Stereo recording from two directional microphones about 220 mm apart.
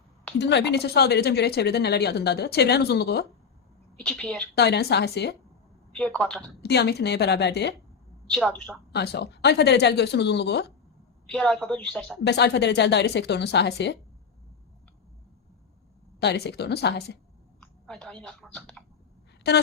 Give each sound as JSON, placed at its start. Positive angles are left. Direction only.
{"t": 0.3, "sound": "speech", "side_deg": 50}
{"t": 3.9, "sound": "a woman's voice", "side_deg": 5}
{"t": 4.5, "sound": "speech", "side_deg": 50}
{"t": 5.9, "sound": "a woman's voice", "side_deg": 5}
{"t": 6.6, "sound": "speech", "side_deg": 50}
{"t": 8.3, "sound": "a woman's voice", "side_deg": 5}
{"t": 8.9, "sound": "speech", "side_deg": 50}
{"t": 11.3, "sound": "a woman's voice", "side_deg": 5}
{"t": 12.2, "sound": "speech", "side_deg": 50}
{"t": 16.2, "sound": "speech", "side_deg": 50}
{"t": 17.6, "sound": "speech", "side_deg": 5}
{"t": 19.4, "sound": "speech", "side_deg": 50}